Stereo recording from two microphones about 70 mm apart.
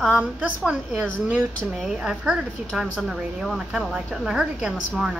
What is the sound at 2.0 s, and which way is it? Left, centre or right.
A woman's voice, centre.